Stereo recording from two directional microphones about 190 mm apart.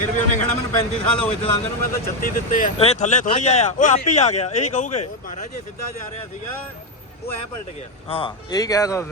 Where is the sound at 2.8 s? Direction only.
35° left (ahead or behind).